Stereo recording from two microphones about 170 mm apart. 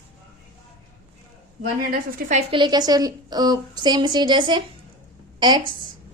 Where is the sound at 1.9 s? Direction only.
55° right (ahead or behind).